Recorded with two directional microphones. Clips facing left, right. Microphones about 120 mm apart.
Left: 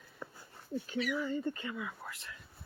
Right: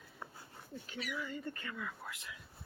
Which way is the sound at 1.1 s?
30° left (ahead or behind).